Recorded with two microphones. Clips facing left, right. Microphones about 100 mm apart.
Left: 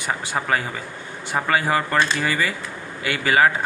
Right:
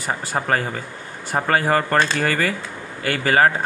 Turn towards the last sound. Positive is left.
turn(degrees=-45)  # may be behind; listen again after turning